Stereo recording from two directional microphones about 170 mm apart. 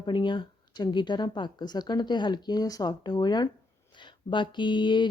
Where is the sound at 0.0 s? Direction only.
25° left (ahead or behind).